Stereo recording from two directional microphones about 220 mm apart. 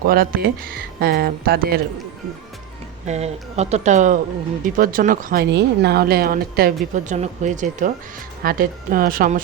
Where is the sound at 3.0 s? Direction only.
30° right (ahead or behind).